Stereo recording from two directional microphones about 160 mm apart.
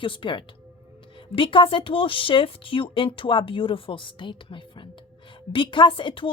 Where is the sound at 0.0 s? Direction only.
30° left (ahead or behind).